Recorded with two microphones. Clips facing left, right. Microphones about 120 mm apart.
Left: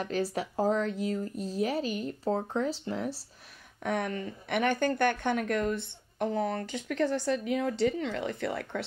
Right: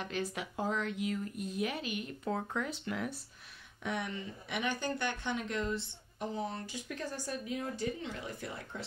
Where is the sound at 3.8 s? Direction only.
50° left (ahead or behind).